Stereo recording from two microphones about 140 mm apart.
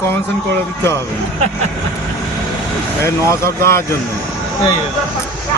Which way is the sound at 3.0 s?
20° left (ahead or behind).